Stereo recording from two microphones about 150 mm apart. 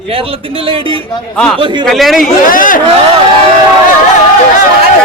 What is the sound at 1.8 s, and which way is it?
Speech, centre (ahead or behind).